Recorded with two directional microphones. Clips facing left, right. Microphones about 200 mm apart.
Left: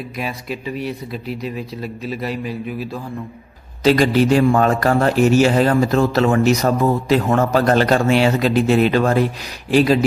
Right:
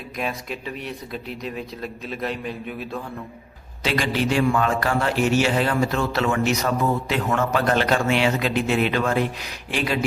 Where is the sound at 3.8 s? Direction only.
40° left (ahead or behind).